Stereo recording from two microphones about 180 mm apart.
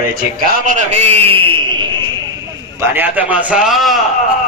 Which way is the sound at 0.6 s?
40° right (ahead or behind).